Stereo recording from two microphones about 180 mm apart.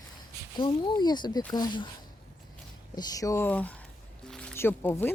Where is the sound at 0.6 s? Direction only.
25° left (ahead or behind).